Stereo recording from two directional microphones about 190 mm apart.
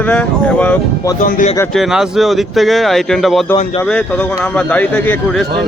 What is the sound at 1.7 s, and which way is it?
A man's voice, centre (ahead or behind).